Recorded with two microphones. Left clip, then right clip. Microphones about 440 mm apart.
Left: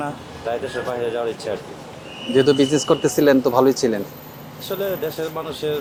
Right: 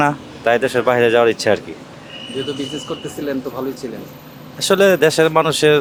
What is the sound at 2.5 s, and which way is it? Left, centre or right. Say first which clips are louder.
Speech: left 9 dB; left.